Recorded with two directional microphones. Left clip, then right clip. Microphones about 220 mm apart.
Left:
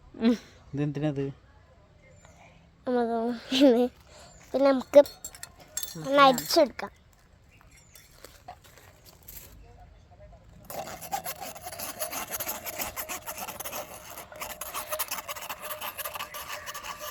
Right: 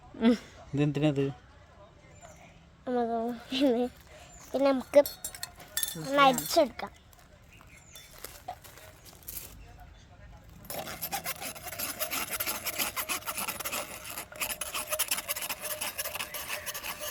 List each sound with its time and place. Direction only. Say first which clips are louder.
0.2 s a woman's voice: even; 25° left (ahead or behind)
0.8 s speech: right 2 dB; 10° right (ahead or behind)
2.8 s a sound: left 3 dB; 30° left (ahead or behind)
4.5 s speech: left 4 dB; 35° left (ahead or behind)
5.4 s chink: right 4 dB; 5° right (ahead or behind)
6.0 s speech: left 4 dB; 40° left (ahead or behind)
8.2 s horse: right 3 dB; 15° right (ahead or behind)
10.7 s rub: left 2 dB; centre (ahead or behind)